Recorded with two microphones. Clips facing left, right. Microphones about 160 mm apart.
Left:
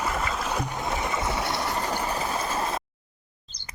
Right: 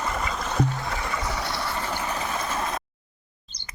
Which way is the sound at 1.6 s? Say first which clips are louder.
Left 2 dB; 40° left (ahead or behind).